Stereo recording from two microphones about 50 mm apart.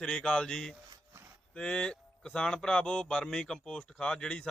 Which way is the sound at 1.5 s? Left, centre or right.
Centre.